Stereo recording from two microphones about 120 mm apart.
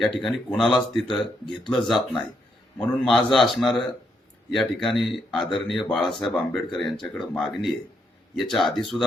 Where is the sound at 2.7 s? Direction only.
Centre (ahead or behind).